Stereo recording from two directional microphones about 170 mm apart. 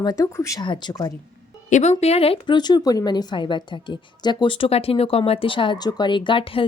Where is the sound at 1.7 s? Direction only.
40° left (ahead or behind).